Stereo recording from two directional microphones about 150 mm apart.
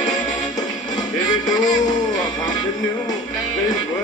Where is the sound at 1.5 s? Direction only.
25° left (ahead or behind).